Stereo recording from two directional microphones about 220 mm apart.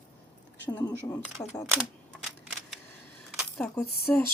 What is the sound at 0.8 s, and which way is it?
Speech, 15° left (ahead or behind).